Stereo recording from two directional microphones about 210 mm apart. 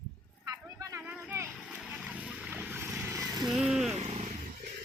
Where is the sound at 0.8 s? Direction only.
15° right (ahead or behind).